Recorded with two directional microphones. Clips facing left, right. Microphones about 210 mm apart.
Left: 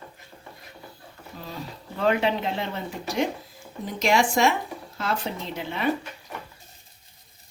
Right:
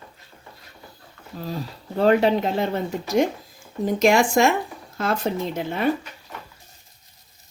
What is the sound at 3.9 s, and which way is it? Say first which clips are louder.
Speech: right 5 dB; 50° right (ahead or behind).